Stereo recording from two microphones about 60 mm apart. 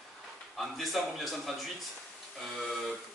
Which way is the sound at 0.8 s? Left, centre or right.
Centre.